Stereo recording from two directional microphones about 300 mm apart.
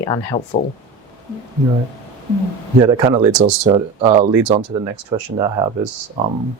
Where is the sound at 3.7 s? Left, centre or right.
Centre.